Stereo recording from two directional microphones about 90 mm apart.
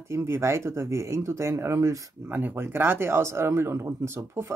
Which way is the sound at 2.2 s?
20° right (ahead or behind).